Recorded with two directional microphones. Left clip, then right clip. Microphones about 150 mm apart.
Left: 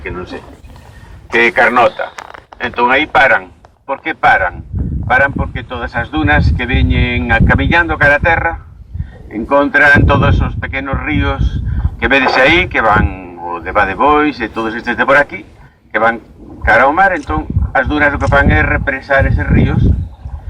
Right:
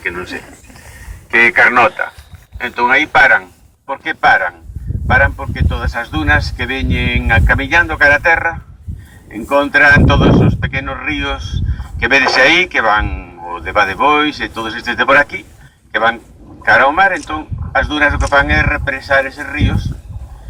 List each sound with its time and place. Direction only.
0.0 s speech: 10° right (ahead or behind)